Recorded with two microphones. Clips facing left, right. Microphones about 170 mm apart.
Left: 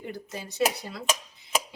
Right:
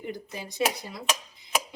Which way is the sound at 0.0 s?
15° right (ahead or behind).